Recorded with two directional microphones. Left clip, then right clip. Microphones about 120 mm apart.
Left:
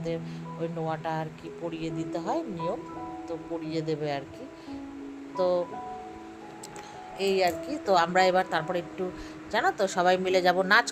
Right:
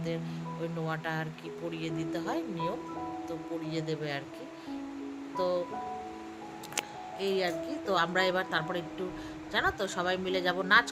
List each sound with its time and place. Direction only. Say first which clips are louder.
0.8 s speech: left 4 dB; 25° left (ahead or behind)
1.7 s speech: left 2 dB; 40° left (ahead or behind)
5.4 s speech: left 5 dB; 45° left (ahead or behind)
7.2 s speech: left 5 dB; 40° left (ahead or behind)
10.1 s a woman's voice: left 8 dB; 60° left (ahead or behind)